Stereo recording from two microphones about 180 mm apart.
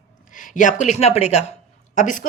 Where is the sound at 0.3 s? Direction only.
45° left (ahead or behind).